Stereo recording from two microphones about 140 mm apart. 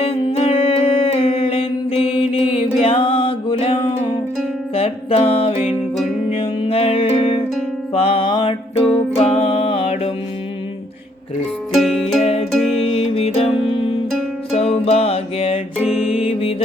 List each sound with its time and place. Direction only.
0.0 s music: 45° left (ahead or behind)
9.1 s music: 45° left (ahead or behind)
11.7 s music: centre (ahead or behind)
12.2 s music: 50° left (ahead or behind)
12.5 s music: centre (ahead or behind)
12.8 s music: 45° left (ahead or behind)
15.8 s music: 5° right (ahead or behind)